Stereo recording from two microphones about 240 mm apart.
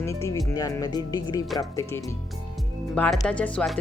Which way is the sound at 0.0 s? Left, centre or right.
Centre.